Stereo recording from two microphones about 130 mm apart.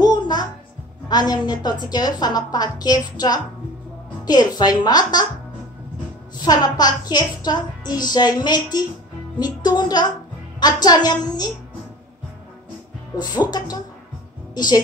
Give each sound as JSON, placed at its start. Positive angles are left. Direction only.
{"t": 0.0, "sound": "music", "side_deg": 30}
{"t": 1.0, "sound": "speech", "side_deg": 30}
{"t": 6.4, "sound": "speech", "side_deg": 30}
{"t": 14.5, "sound": "a woman's voice", "side_deg": 30}